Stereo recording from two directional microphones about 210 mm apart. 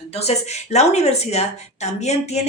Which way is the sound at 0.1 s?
30° left (ahead or behind).